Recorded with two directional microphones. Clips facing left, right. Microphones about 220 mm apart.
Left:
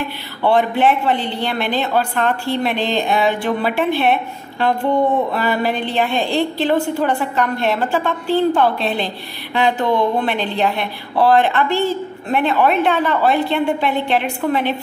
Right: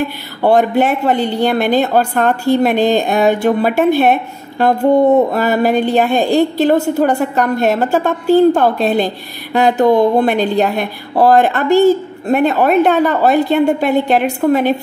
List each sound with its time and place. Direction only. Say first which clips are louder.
0.4 s a woman's voice: right 4 dB; 45° right (ahead or behind)